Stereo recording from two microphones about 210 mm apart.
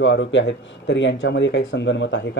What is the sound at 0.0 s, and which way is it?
Speech, 60° left (ahead or behind).